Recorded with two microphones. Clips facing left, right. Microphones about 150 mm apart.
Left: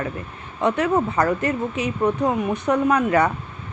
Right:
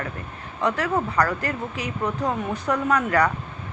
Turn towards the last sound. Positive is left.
turn(degrees=20)  # may be behind; listen again after turning